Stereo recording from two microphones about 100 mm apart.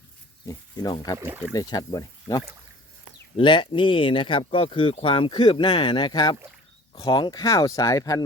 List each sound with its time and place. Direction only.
0.4 s speech: 40° left (ahead or behind)
1.2 s speech: 20° right (ahead or behind)
1.5 s speech: 40° left (ahead or behind)
3.3 s speech: 55° left (ahead or behind); by 8.2 s 35° left (ahead or behind)